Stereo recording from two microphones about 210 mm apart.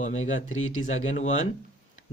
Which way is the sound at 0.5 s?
75° left (ahead or behind).